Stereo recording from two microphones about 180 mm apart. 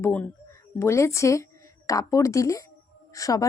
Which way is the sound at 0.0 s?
10° left (ahead or behind).